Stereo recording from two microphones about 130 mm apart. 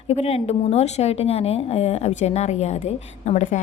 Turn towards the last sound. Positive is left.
turn(degrees=65)  # may be behind; listen again after turning